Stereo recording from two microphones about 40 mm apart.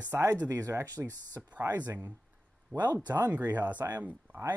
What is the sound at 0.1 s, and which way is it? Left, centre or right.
Speech, right.